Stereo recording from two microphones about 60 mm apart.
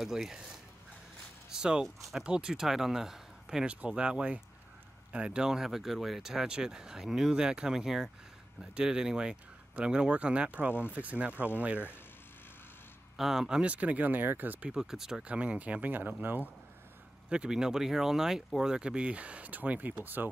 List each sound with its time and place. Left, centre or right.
0.0 s speech: centre
1.5 s speech: centre
13.2 s speech: centre
13.6 s speech: right
14.7 s speech: centre
15.2 s speech: right
17.3 s speech: centre